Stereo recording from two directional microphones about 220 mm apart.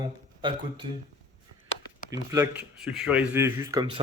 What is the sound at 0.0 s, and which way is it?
Speech, 20° right (ahead or behind).